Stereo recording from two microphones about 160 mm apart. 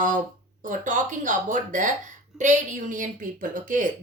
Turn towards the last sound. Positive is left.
turn(degrees=-55)  # may be behind; listen again after turning